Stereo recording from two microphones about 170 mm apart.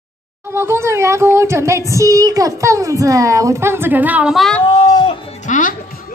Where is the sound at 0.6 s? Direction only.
15° right (ahead or behind); by 4.6 s 5° left (ahead or behind).